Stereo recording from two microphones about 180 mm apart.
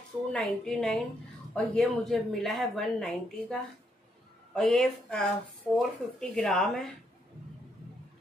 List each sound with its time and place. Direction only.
0.3 s a woman's voice: 5° left (ahead or behind)
4.6 s a woman's voice: 5° left (ahead or behind)